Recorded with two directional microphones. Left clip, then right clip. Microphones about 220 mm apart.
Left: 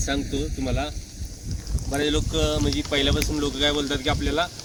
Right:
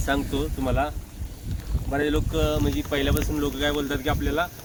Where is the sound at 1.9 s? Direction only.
55° right (ahead or behind).